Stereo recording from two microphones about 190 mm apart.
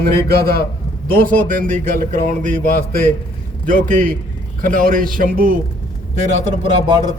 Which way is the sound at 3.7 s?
45° right (ahead or behind).